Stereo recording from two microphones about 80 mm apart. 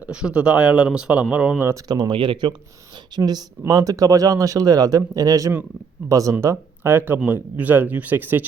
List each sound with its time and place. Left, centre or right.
0.0 s speech: centre
1.9 s speech: right
3.2 s speech: right
6.4 s speech: right